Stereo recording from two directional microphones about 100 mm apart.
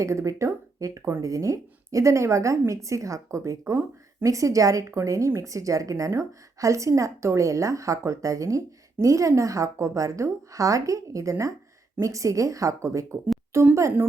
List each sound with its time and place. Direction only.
0.0 s a woman's voice: 30° right (ahead or behind)